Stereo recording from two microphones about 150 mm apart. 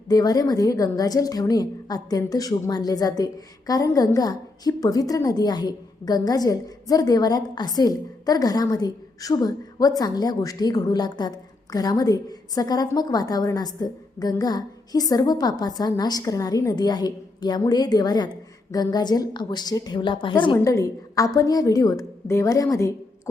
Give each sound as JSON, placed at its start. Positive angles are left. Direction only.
{"t": 0.1, "sound": "a woman's voice", "side_deg": 25}
{"t": 20.6, "sound": "a woman's voice", "side_deg": 20}